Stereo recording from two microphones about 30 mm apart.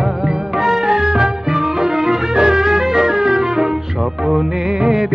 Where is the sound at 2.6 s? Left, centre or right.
Centre.